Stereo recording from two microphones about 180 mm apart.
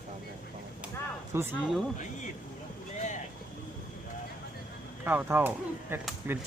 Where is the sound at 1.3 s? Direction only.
15° right (ahead or behind).